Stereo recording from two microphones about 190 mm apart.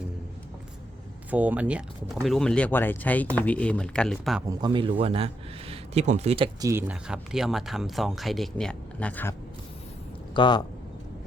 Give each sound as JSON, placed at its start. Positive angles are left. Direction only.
{"t": 1.3, "sound": "speech", "side_deg": -10}
{"t": 4.4, "sound": "a man's voice", "side_deg": -25}
{"t": 6.7, "sound": "speech", "side_deg": -10}
{"t": 10.3, "sound": "speech", "side_deg": 25}